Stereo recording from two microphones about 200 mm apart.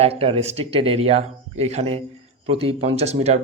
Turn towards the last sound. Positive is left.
turn(degrees=-30)  # may be behind; listen again after turning